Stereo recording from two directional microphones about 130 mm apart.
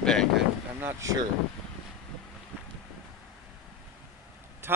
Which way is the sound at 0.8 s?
20° right (ahead or behind).